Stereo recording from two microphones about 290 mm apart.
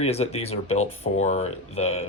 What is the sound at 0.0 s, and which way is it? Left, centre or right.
Speech, left.